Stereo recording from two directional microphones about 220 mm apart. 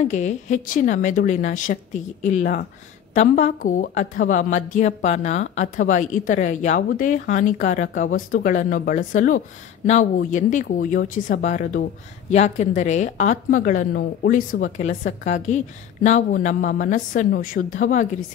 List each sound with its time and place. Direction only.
0.0 s a woman's voice: 30° left (ahead or behind)